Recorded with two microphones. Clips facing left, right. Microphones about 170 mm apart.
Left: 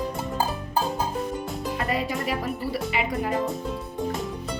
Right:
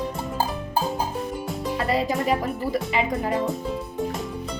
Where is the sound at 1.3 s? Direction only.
Centre (ahead or behind).